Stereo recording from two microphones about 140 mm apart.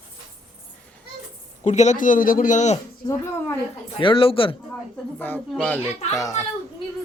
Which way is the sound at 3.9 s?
35° left (ahead or behind).